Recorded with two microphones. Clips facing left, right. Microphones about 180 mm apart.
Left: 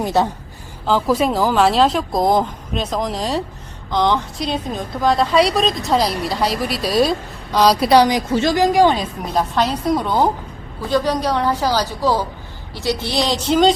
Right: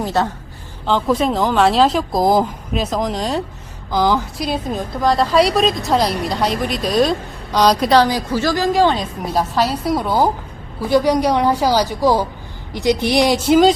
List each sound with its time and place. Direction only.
0.0 s a woman's voice: 15° left (ahead or behind)
9.2 s a woman's voice: 5° right (ahead or behind)